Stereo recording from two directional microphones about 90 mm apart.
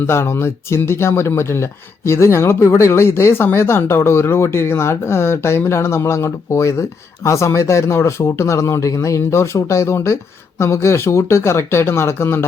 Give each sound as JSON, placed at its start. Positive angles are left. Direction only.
{"t": 0.1, "sound": "speech", "side_deg": 30}